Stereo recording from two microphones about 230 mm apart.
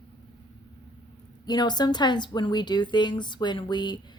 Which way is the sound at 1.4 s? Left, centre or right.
Centre.